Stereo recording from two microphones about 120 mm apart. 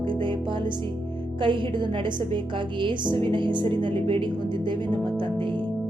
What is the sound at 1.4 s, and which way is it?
Speech, 45° right (ahead or behind).